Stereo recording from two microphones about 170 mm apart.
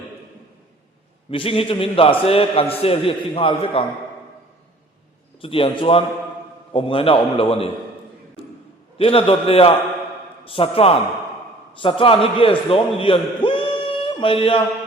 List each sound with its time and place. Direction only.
1.3 s a man's voice: 30° left (ahead or behind)
5.4 s a man's voice: 30° left (ahead or behind)
9.0 s a man's voice: 35° left (ahead or behind)